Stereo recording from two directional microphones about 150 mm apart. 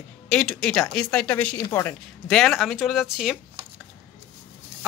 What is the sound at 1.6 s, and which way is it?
Speech, 20° left (ahead or behind).